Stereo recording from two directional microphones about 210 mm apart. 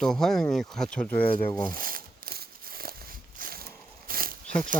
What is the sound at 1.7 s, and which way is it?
Crumpling, 40° right (ahead or behind).